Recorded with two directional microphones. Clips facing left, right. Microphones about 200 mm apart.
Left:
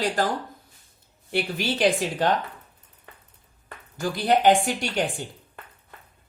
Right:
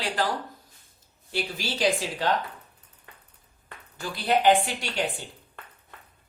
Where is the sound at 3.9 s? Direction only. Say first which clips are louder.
Left 3 dB; 45° left (ahead or behind).